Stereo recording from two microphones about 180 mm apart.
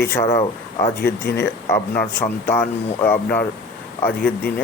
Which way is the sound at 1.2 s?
65° left (ahead or behind).